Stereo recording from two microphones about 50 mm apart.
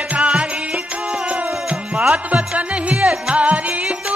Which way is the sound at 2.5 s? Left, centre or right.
Right.